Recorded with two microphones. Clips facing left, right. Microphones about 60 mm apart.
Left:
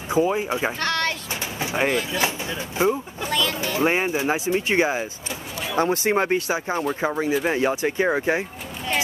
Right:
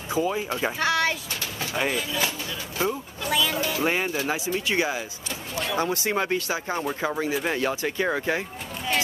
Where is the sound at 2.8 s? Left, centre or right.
Left.